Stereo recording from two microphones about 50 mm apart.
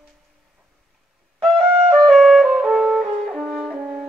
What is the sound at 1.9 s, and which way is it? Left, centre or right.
Music, centre.